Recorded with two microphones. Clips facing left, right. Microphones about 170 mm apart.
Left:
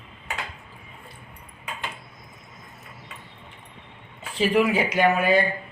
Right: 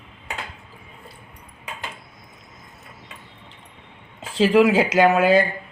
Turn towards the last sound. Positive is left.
turn(degrees=-90)